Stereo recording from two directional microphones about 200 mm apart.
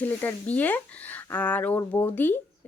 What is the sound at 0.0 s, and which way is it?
Speech, 10° left (ahead or behind).